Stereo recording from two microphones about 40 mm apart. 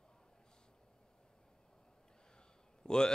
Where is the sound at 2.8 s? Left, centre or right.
Centre.